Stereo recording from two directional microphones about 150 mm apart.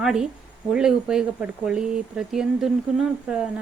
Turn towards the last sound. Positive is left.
turn(degrees=-5)  # may be behind; listen again after turning